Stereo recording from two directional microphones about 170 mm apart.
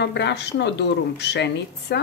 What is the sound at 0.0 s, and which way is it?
A woman's voice, 85° left.